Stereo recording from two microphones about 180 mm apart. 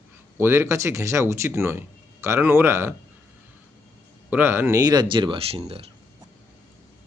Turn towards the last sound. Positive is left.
turn(degrees=-30)  # may be behind; listen again after turning